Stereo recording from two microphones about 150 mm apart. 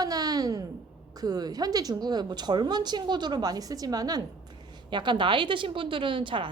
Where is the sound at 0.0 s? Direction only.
25° right (ahead or behind).